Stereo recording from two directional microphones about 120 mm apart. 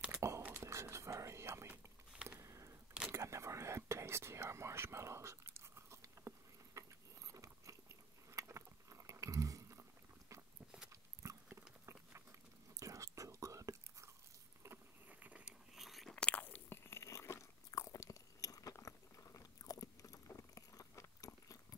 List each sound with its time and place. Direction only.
0.1 s whispering: 20° right (ahead or behind)
2.2 s a sound: 25° right (ahead or behind)
3.1 s whispering: 25° right (ahead or behind)
8.3 s vehicle: 25° right (ahead or behind)
11.8 s a sound: 20° right (ahead or behind)
12.7 s whispering: 25° right (ahead or behind)
14.6 s biting: 15° right (ahead or behind); by 21.7 s 30° left (ahead or behind)